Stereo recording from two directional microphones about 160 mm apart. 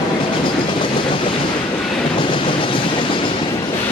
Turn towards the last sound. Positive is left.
turn(degrees=30)  # may be behind; listen again after turning